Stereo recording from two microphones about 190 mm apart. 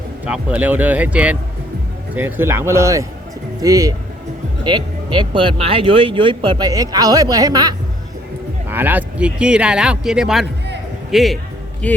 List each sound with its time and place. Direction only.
0.3 s speech: 5° right (ahead or behind)
8.7 s a man's voice: 10° right (ahead or behind); by 12.0 s 5° left (ahead or behind)